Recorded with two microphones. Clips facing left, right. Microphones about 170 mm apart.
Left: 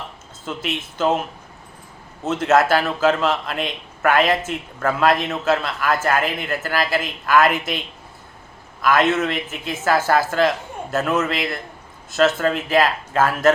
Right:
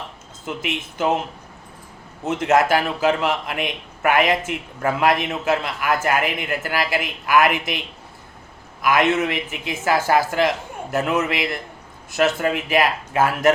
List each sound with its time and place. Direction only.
0.4 s a man's voice: 15° right (ahead or behind)
2.2 s a man's voice: 15° right (ahead or behind)